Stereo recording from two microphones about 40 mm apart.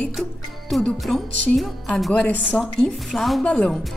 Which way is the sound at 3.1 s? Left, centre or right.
Centre.